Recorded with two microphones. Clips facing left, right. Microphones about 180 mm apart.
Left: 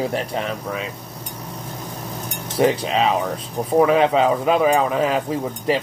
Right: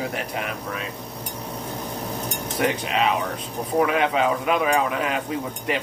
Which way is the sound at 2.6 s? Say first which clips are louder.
Left 5 dB; 35° left (ahead or behind).